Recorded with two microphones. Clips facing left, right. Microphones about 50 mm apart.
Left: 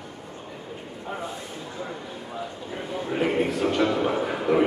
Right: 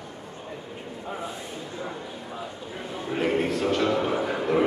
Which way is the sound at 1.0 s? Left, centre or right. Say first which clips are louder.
Left 1 dB; centre.